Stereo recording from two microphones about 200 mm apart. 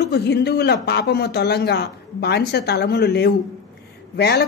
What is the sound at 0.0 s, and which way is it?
Speech, 55° left (ahead or behind).